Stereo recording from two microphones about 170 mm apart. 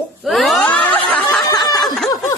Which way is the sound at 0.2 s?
Centre (ahead or behind).